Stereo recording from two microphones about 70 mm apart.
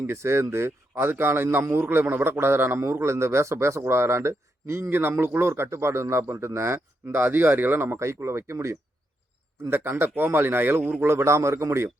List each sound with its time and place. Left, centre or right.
0.1 s a man's voice: right
6.7 s a man's voice: right
11.0 s a man's voice: right